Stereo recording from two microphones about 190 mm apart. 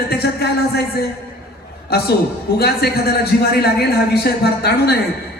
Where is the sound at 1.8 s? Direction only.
55° left (ahead or behind).